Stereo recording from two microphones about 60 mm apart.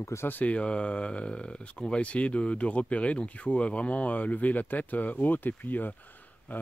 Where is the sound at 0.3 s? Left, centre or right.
Left.